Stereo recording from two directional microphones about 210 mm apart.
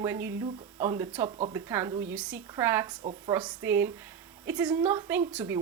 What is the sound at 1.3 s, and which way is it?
Speech, 30° right (ahead or behind).